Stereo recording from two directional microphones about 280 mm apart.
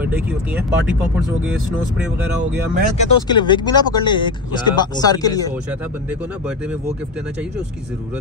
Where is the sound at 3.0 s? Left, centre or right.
Centre.